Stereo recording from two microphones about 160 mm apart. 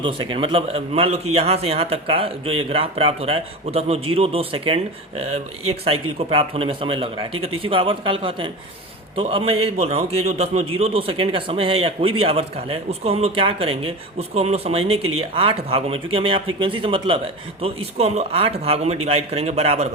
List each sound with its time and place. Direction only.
0.0 s a man's voice: 35° right (ahead or behind)